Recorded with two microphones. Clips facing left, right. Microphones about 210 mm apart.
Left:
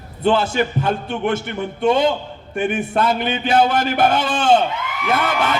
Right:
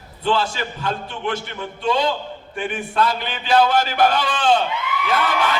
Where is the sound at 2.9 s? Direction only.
55° left (ahead or behind).